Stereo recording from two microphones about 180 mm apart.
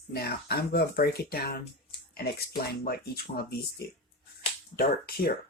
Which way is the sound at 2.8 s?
60° left (ahead or behind).